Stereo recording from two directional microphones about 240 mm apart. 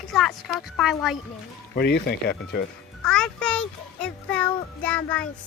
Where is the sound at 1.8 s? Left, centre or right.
Left.